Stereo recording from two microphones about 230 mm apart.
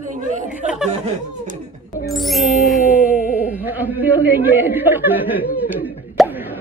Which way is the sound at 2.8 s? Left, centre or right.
Left.